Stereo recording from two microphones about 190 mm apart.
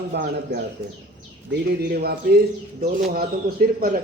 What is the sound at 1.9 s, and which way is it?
A man's voice, 55° right (ahead or behind).